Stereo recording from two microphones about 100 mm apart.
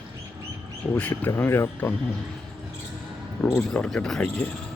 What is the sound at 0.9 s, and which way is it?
Speech, 15° left (ahead or behind).